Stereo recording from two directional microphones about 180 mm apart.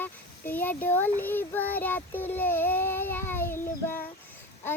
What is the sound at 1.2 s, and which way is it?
Speech, 10° left (ahead or behind).